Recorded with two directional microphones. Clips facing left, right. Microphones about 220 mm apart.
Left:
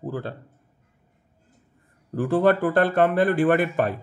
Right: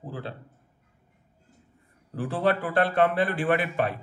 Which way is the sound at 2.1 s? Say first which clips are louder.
Left 6 dB; 45° left (ahead or behind).